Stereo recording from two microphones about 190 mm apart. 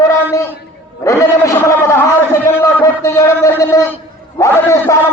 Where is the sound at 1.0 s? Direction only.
15° left (ahead or behind).